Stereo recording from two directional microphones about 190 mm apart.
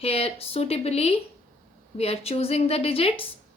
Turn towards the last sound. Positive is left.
turn(degrees=30)  # may be behind; listen again after turning